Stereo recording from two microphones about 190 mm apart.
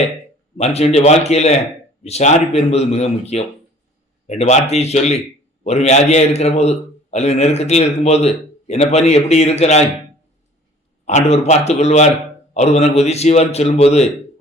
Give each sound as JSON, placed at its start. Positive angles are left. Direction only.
{"t": 0.5, "sound": "a man's voice", "side_deg": 35}
{"t": 11.0, "sound": "a man's voice", "side_deg": 35}